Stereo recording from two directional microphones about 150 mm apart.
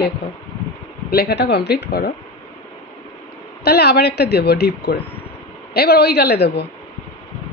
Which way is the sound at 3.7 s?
90° left.